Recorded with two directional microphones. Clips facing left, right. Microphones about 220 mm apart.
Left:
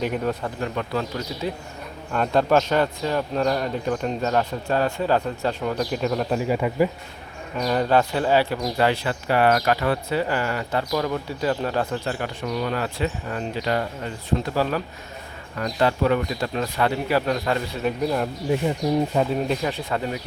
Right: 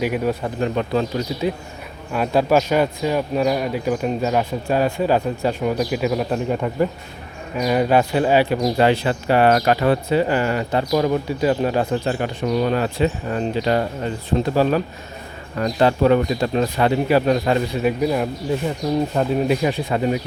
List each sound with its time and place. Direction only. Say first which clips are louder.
0.0 s a man's voice: right 4 dB; 10° right (ahead or behind)
0.6 s speech: right 7 dB; 25° right (ahead or behind)
2.1 s a man's voice: right 2 dB; 10° right (ahead or behind)
6.5 s speech: left 1 dB; 5° left (ahead or behind)
7.5 s a man's voice: right 3 dB; 10° right (ahead or behind)